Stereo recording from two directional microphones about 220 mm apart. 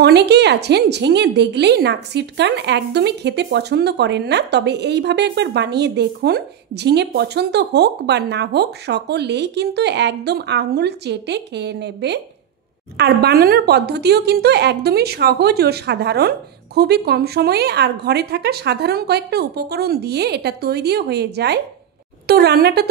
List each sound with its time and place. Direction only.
0.0 s a woman's voice: 50° right (ahead or behind)